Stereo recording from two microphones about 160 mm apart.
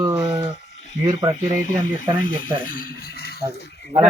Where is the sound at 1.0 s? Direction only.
25° right (ahead or behind).